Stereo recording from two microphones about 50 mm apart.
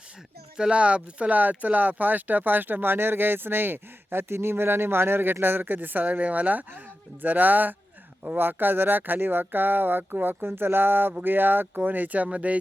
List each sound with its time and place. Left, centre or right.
0.5 s speech: centre